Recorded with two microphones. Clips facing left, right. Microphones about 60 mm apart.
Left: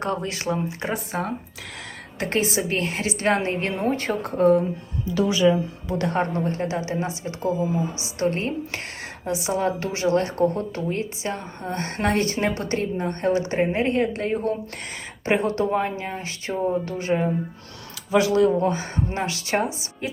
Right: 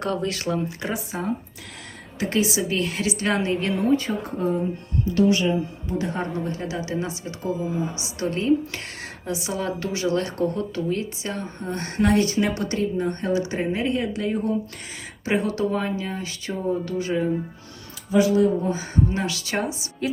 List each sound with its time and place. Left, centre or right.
0.0 s speech: left
2.1 s a woman's voice: left
5.9 s speech: left
6.1 s a woman's voice: left
18.1 s speech: left
19.1 s a woman's voice: left